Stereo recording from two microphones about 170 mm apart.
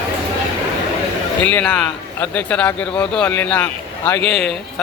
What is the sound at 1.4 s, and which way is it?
A man's voice, 10° left (ahead or behind).